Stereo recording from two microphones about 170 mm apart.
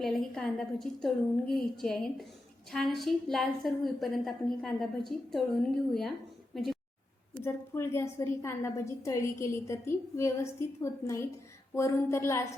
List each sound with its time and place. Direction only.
0.0 s a woman's voice: centre (ahead or behind)
6.5 s a sound: centre (ahead or behind)
7.3 s a woman's voice: 15° left (ahead or behind)